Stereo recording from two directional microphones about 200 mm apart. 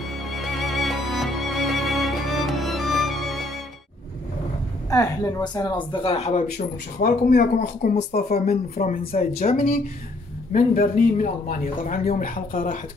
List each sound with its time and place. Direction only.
0.3 s music: centre (ahead or behind)
4.9 s speech: 20° left (ahead or behind)
7.0 s speech: 45° left (ahead or behind)
7.9 s speech: 35° left (ahead or behind)
8.5 s speech: 45° left (ahead or behind)